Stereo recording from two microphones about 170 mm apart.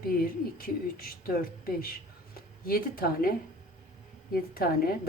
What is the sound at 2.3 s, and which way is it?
Speech, 60° left (ahead or behind).